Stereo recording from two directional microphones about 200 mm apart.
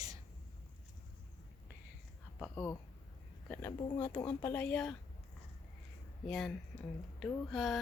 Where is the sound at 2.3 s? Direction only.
10° left (ahead or behind).